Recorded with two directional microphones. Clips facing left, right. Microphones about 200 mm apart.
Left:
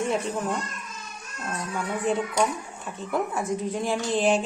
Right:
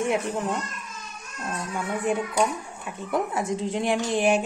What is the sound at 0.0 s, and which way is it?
Speech, 15° right (ahead or behind).